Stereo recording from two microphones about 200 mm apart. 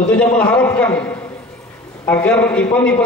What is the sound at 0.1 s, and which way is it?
Speech, 5° left (ahead or behind).